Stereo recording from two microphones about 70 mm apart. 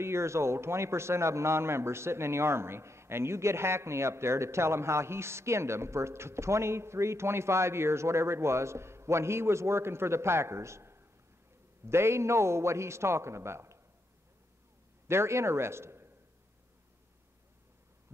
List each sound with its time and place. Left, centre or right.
0.0 s a man's voice: right
15.0 s a man's voice: right